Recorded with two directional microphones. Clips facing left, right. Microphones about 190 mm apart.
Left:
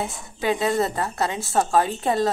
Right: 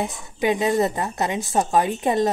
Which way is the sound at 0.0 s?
20° right (ahead or behind).